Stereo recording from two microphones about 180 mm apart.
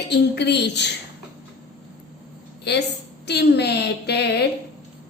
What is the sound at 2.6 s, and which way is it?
A woman's voice, 70° left (ahead or behind).